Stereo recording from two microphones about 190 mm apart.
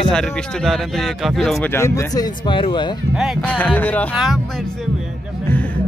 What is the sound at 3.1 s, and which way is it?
Speech, centre (ahead or behind).